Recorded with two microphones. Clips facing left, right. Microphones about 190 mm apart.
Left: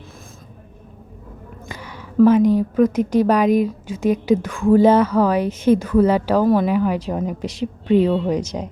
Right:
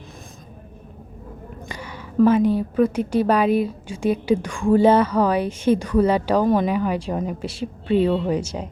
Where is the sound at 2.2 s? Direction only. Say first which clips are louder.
Left 3 dB; 10° left (ahead or behind).